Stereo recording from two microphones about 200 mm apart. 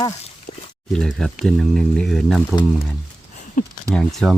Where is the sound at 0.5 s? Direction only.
30° left (ahead or behind).